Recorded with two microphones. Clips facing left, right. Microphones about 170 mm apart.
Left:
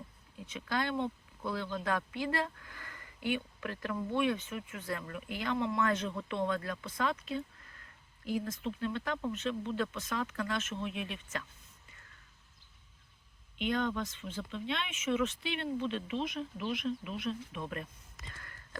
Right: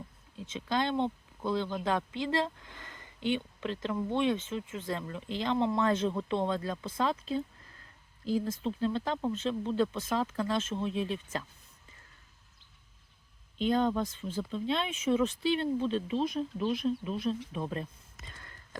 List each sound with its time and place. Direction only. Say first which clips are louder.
0.3 s speech: right 4 dB; 25° right (ahead or behind)
13.6 s speech: right 5 dB; 35° right (ahead or behind)
18.3 s a sound: right 1 dB; 20° right (ahead or behind)